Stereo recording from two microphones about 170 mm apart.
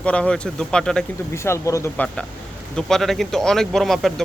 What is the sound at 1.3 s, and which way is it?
Speech, 15° left (ahead or behind).